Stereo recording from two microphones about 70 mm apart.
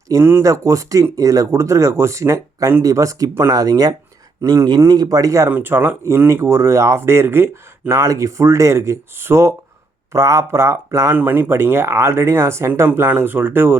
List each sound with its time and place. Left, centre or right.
0.2 s speech: right
0.4 s speech: right
3.5 s speech: right
4.4 s speech: right
4.8 s speech: right
5.5 s speech: right
6.1 s speech: right
7.9 s speech: right
11.1 s speech: right